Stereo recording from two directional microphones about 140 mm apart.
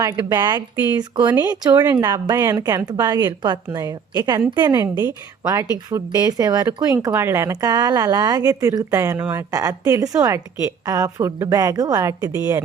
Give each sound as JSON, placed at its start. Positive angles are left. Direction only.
{"t": 0.0, "sound": "speech", "side_deg": -30}